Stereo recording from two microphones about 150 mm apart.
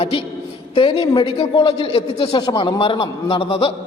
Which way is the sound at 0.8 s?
35° left (ahead or behind).